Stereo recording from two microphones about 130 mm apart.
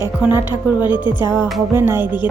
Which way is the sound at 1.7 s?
15° right (ahead or behind).